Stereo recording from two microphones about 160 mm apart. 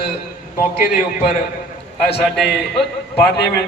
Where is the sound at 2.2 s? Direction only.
5° left (ahead or behind).